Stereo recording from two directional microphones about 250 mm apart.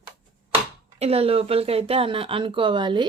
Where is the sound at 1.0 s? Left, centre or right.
Right.